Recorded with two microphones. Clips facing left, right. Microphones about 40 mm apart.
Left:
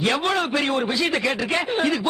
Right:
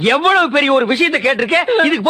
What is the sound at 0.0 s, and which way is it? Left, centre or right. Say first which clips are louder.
A man's voice: right 10 dB; right.